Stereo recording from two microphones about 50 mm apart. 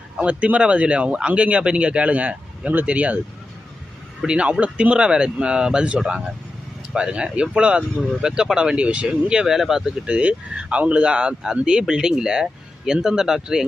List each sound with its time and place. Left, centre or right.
0.2 s speech: right
4.3 s speech: right
10.1 s speech: right